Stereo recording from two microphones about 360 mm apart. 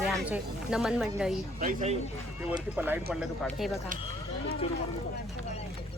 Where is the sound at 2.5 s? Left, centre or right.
Centre.